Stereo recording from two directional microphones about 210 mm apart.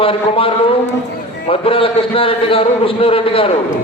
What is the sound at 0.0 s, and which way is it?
A man's voice, 25° left (ahead or behind).